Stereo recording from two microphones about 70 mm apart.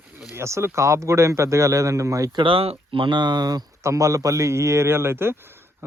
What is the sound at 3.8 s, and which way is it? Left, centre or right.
Speech, right.